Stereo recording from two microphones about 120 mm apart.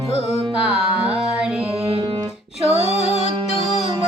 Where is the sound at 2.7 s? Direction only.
60° right (ahead or behind).